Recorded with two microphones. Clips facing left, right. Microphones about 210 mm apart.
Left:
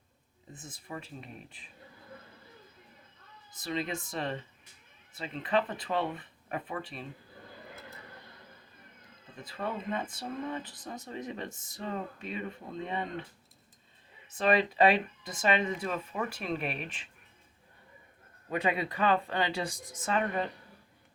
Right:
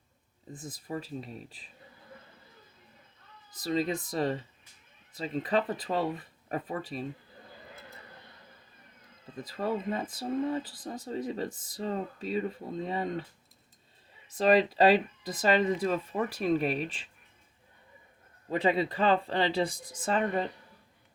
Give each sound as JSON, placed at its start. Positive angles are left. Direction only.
{"t": 0.7, "sound": "speech", "side_deg": -35}
{"t": 3.6, "sound": "speech", "side_deg": -40}
{"t": 9.4, "sound": "speech", "side_deg": -35}
{"t": 14.3, "sound": "speech", "side_deg": -35}
{"t": 18.5, "sound": "speech", "side_deg": -30}